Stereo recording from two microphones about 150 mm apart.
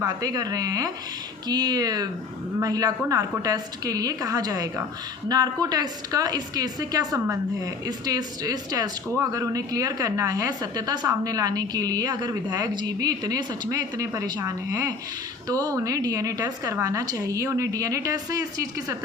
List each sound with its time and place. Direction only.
0.0 s speech: 25° right (ahead or behind)